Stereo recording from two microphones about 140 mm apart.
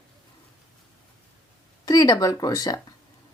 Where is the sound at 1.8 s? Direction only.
25° left (ahead or behind).